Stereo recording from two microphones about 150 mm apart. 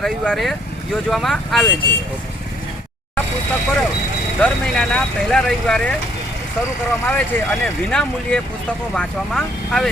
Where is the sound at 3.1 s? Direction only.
10° left (ahead or behind).